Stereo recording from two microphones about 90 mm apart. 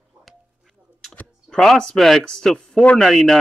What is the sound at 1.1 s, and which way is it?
Speech, 5° left (ahead or behind).